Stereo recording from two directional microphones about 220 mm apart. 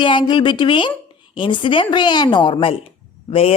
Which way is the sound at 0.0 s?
20° left (ahead or behind).